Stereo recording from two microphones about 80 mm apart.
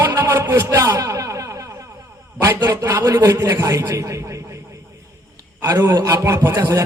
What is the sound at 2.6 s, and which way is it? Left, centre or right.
A man's voice, right.